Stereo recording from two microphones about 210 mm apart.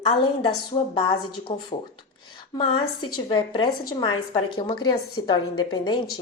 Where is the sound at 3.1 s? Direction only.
20° left (ahead or behind).